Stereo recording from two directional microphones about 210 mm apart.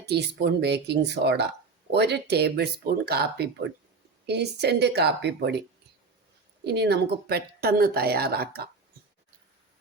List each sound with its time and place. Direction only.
0.0 s a woman's voice: 55° right (ahead or behind)
6.7 s a woman's voice: 50° right (ahead or behind)